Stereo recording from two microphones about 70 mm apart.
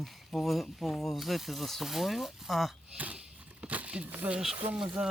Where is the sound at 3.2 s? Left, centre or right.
Centre.